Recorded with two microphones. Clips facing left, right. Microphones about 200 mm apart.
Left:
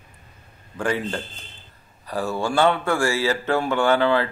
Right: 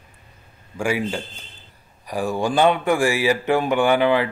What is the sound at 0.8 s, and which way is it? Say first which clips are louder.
A man's voice: right 2 dB; 10° right (ahead or behind).